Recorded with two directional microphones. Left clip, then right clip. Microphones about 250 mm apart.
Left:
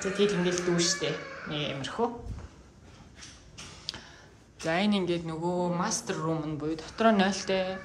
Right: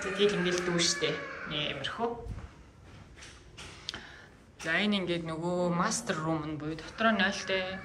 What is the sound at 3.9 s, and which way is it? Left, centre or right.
Arrow, centre.